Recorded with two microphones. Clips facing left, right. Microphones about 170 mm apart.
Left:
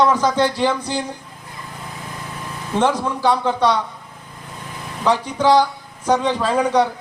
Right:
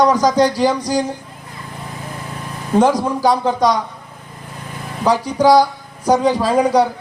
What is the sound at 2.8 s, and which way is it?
Speech, 40° right (ahead or behind).